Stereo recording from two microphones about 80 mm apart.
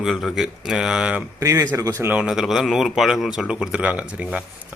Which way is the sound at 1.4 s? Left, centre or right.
Right.